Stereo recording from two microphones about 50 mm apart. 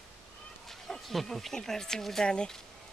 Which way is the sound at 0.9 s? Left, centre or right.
Centre.